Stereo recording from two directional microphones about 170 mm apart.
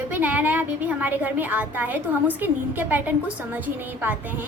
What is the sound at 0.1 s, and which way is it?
A woman's voice, 10° right (ahead or behind).